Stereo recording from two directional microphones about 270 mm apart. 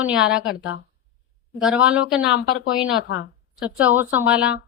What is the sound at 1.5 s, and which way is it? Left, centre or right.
Speech, centre.